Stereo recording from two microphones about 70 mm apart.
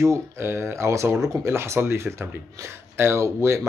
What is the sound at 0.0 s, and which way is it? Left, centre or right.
Speech, right.